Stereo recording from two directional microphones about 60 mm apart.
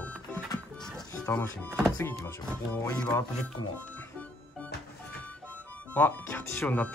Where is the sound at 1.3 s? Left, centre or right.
Left.